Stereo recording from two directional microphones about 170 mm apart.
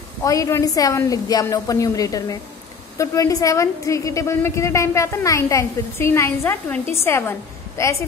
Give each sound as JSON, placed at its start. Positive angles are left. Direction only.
{"t": 0.2, "sound": "a woman's voice", "side_deg": 20}